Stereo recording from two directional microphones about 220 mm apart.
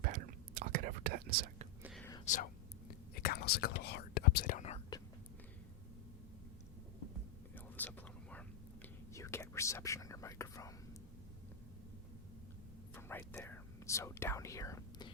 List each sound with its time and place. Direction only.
0.6 s whispering: 40° right (ahead or behind)
1.8 s whispering: centre (ahead or behind)
2.2 s speech: 35° left (ahead or behind)
3.2 s speech: 45° left (ahead or behind)
7.5 s whispering: 5° left (ahead or behind)
12.9 s whispering: 10° left (ahead or behind)